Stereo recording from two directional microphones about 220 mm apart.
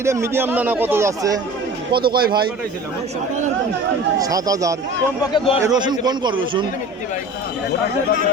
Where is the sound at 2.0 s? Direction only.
45° right (ahead or behind).